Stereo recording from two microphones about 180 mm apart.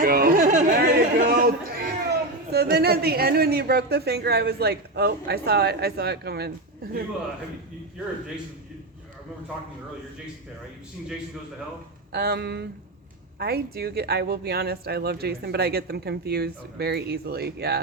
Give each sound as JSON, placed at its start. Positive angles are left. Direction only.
{"t": 0.0, "sound": "chatter", "side_deg": -55}
{"t": 12.1, "sound": "speech", "side_deg": -60}